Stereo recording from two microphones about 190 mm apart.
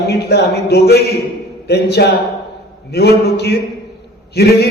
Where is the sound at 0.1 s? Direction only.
60° left (ahead or behind).